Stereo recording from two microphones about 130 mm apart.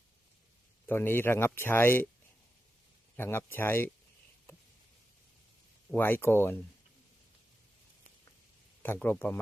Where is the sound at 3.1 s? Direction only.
15° left (ahead or behind).